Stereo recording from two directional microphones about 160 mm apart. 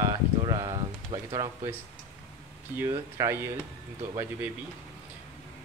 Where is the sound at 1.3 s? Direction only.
20° right (ahead or behind).